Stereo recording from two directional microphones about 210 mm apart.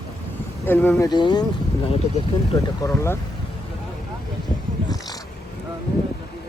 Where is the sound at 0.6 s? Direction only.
10° left (ahead or behind); by 2.2 s 25° left (ahead or behind).